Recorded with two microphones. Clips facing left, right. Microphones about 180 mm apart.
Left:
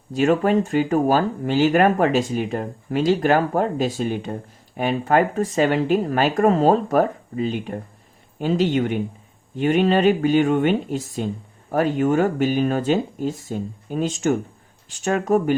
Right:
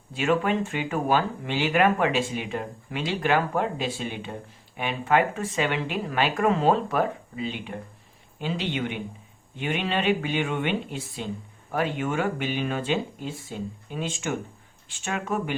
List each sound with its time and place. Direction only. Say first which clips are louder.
0.1 s speech: left 6 dB; 40° left (ahead or behind)